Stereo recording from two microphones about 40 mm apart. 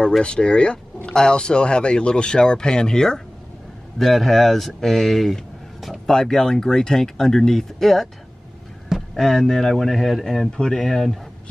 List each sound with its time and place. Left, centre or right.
0.2 s speech: left
4.0 s speech: centre
6.0 s speech: centre
9.1 s speech: centre
10.5 s speech: left
10.8 s speech: centre